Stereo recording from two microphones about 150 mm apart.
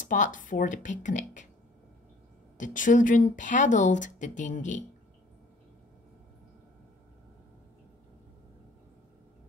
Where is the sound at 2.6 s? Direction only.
60° left (ahead or behind).